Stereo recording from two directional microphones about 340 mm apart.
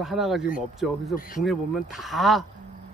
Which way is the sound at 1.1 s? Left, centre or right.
Left.